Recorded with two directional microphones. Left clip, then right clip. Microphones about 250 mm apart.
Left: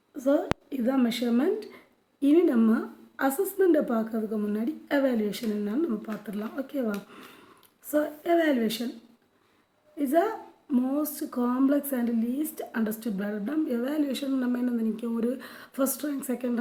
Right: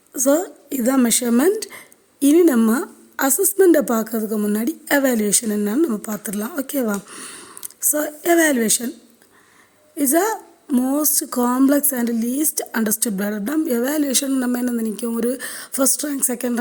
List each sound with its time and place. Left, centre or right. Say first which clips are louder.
0.1 s a woman's voice: right 7 dB; right
10.0 s a woman's voice: right 6 dB; right